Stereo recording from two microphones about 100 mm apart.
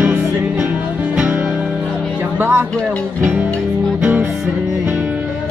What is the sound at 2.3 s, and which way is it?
Music, 20° right (ahead or behind).